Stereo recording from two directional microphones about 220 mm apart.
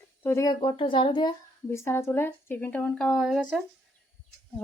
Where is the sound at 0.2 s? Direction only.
10° left (ahead or behind).